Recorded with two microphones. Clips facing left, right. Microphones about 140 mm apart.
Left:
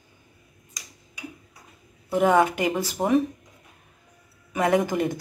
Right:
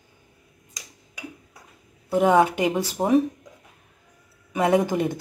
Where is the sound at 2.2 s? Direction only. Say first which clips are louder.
Right 1 dB; 5° right (ahead or behind).